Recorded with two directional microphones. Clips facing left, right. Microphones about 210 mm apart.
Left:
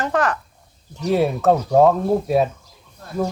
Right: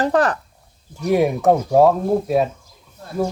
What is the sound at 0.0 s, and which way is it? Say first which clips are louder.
Speech: right 3 dB; 35° right (ahead or behind).